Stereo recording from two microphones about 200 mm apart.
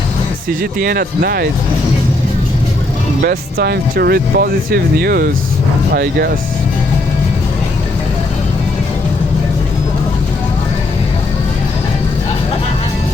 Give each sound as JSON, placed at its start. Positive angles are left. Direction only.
{"t": 0.6, "sound": "speech", "side_deg": -50}
{"t": 3.2, "sound": "speech", "side_deg": -50}